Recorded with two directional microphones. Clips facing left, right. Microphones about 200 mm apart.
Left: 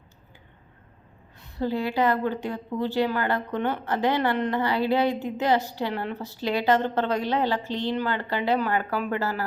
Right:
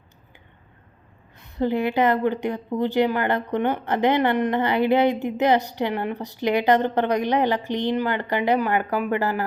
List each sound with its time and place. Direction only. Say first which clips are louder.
1.5 s a woman's voice: right 4 dB; 20° right (ahead or behind)